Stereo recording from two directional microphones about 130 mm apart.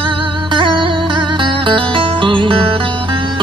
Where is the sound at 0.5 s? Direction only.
40° right (ahead or behind).